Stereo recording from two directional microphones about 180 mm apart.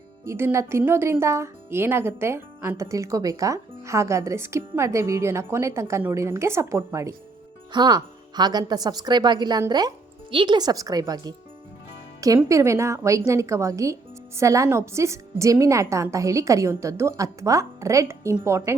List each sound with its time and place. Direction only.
0.3 s speech: 15° right (ahead or behind)
12.4 s speech: 15° right (ahead or behind)